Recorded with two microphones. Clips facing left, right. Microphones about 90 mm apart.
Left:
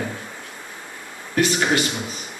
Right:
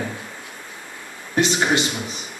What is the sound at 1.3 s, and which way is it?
Speech, 20° right (ahead or behind).